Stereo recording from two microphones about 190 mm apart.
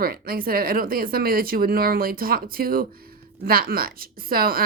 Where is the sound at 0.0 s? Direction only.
50° right (ahead or behind).